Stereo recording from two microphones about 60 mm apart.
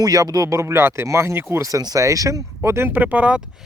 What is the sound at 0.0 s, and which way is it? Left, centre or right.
Speech, right.